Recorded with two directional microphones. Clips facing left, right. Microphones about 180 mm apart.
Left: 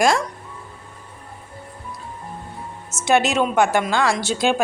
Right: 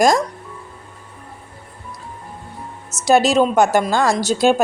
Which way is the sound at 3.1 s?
35° right (ahead or behind).